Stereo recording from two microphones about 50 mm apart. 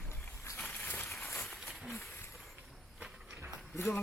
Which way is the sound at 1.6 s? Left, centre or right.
Centre.